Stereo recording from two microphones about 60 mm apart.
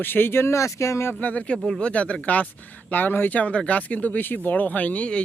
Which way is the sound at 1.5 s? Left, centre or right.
Centre.